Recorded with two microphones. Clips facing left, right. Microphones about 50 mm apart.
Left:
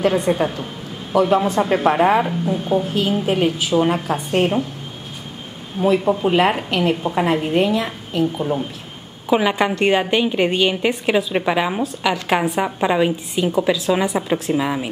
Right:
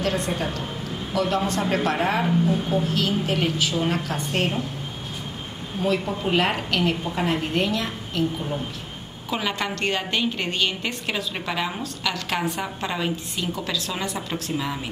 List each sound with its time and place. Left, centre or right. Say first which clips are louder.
0.0 s a woman's voice: left 8 dB; centre
6.2 s a woman's voice: left 6 dB; centre
7.3 s a woman's voice: left 6 dB; centre